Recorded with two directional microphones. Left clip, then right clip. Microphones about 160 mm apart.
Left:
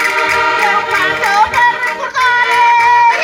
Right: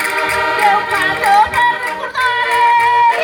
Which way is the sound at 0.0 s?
60° right (ahead or behind).